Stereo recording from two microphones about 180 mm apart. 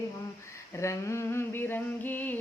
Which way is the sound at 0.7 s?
15° left (ahead or behind).